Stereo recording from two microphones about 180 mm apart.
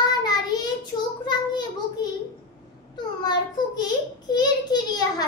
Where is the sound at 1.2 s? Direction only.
25° left (ahead or behind).